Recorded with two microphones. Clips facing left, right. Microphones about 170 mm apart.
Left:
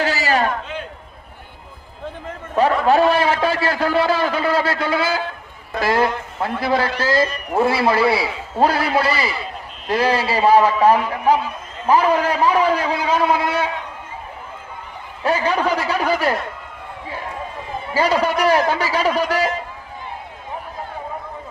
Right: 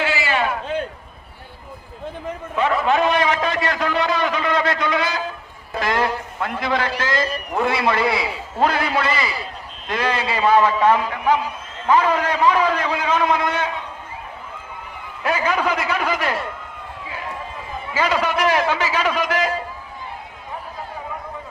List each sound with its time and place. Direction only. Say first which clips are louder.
0.0 s a sound: left 3 dB; 40° left (ahead or behind)
2.8 s a man's voice: left 2 dB; 35° left (ahead or behind)
15.2 s a man's voice: left 2 dB; 30° left (ahead or behind)
17.9 s a man's voice: left 3 dB; 35° left (ahead or behind)